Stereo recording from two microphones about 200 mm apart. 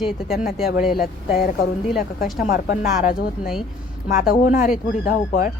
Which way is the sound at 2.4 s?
45° left (ahead or behind).